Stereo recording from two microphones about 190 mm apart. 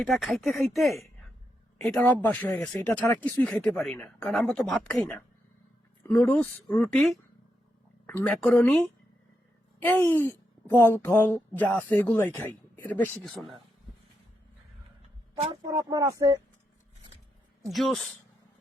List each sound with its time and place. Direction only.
0.0 s a woman's voice: centre (ahead or behind)
15.4 s speech: 20° right (ahead or behind)
17.7 s speech: centre (ahead or behind)